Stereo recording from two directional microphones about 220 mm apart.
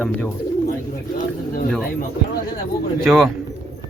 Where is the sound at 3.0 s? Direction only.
Centre (ahead or behind).